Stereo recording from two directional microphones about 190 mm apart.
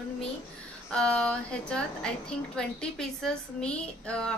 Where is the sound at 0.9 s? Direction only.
5° left (ahead or behind).